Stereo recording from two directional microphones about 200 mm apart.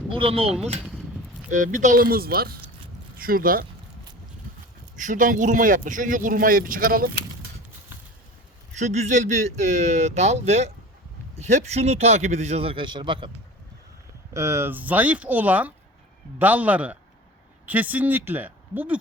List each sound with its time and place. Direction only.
0.1 s speech: 25° right (ahead or behind)
0.8 s a sound: centre (ahead or behind)
1.5 s speech: 40° right (ahead or behind)
4.9 s speech: 40° right (ahead or behind)
8.8 s speech: 35° right (ahead or behind)
14.3 s speech: 15° right (ahead or behind)